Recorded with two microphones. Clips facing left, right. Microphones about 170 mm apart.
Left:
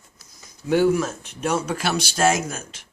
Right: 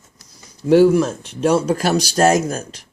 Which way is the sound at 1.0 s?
30° right (ahead or behind).